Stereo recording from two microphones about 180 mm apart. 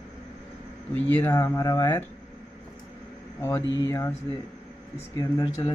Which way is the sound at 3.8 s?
15° left (ahead or behind).